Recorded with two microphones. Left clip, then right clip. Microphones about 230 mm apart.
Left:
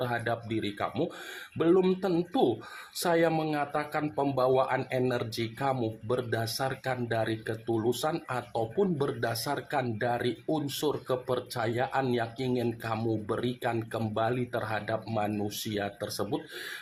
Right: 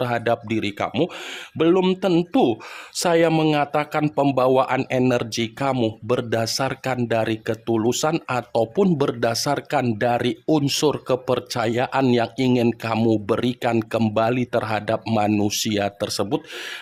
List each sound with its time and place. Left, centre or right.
0.0 s speech: right